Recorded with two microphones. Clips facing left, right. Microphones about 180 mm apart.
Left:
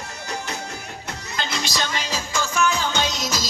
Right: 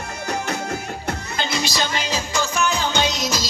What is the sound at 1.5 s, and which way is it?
Music, 10° right (ahead or behind).